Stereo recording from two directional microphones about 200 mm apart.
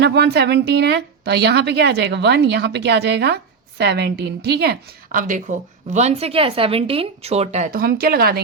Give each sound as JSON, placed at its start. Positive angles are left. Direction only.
{"t": 0.0, "sound": "a woman's voice", "side_deg": -55}